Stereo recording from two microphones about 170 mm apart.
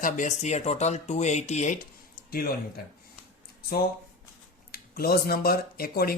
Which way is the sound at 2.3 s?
60° left (ahead or behind).